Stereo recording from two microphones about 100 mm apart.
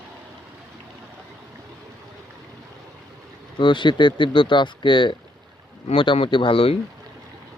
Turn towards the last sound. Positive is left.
turn(degrees=65)  # may be behind; listen again after turning